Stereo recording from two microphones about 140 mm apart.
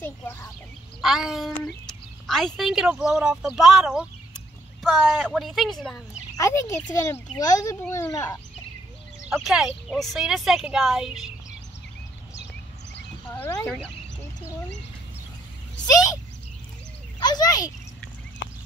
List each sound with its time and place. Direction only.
0.0 s speech: 15° left (ahead or behind)
1.0 s speech: centre (ahead or behind)
6.3 s speech: 20° left (ahead or behind)
9.2 s speech: 5° right (ahead or behind)
13.3 s speech: 20° left (ahead or behind)
15.9 s speech: 25° left (ahead or behind)
17.2 s speech: 30° left (ahead or behind)